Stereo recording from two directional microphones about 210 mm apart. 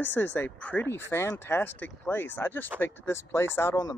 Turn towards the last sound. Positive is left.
turn(degrees=15)  # may be behind; listen again after turning